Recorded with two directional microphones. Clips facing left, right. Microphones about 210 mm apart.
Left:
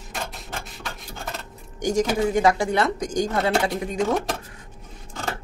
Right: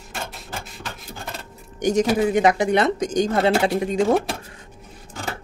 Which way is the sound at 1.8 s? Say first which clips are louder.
Right 3 dB; 20° right (ahead or behind).